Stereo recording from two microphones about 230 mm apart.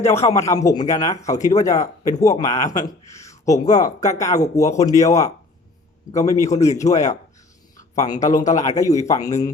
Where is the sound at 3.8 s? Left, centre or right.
Left.